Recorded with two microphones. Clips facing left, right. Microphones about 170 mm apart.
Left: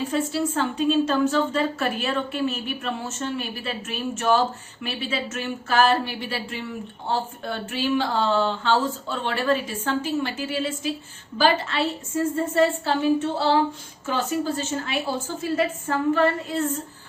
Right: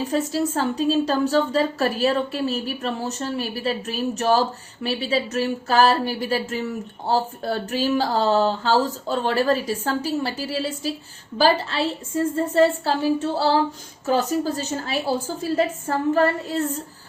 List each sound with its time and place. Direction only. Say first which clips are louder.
0.1 s a woman's voice: right 2 dB; 40° right (ahead or behind)